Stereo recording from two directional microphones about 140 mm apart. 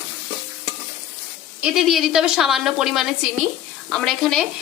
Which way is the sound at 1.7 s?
Centre (ahead or behind).